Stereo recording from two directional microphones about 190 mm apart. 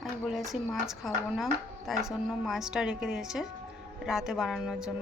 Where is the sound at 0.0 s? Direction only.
Centre (ahead or behind).